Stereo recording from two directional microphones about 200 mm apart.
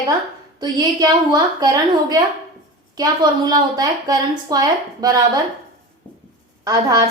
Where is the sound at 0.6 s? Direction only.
20° right (ahead or behind).